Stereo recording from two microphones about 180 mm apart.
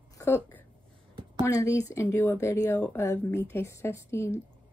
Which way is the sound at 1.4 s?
15° left (ahead or behind).